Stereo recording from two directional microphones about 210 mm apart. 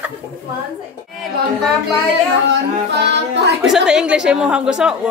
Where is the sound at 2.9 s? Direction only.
55° right (ahead or behind).